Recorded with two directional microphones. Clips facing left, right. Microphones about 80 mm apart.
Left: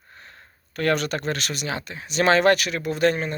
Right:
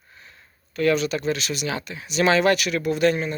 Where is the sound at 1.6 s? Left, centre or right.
Left.